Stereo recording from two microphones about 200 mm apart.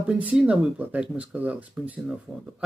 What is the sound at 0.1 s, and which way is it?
Speech, 5° right (ahead or behind).